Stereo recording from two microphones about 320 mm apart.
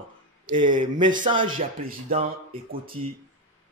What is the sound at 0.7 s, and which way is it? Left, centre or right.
Speech, right.